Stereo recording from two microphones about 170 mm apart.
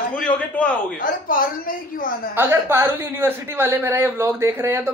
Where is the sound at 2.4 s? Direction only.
15° right (ahead or behind).